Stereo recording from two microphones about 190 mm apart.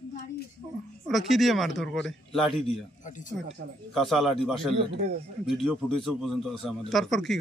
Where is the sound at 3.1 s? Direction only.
40° left (ahead or behind).